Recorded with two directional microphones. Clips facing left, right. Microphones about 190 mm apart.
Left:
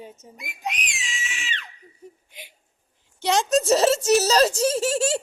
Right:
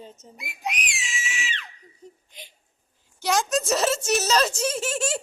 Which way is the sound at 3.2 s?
30° left (ahead or behind).